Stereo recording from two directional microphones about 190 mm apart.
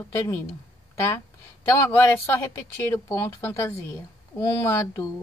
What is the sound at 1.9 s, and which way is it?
Speech, 10° left (ahead or behind).